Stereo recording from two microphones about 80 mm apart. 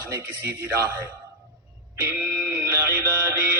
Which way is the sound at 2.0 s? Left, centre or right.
Right.